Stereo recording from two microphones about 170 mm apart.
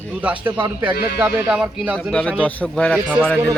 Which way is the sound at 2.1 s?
5° left (ahead or behind).